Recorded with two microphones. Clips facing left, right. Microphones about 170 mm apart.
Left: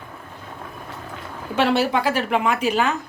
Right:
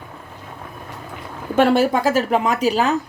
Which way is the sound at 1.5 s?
50° right (ahead or behind).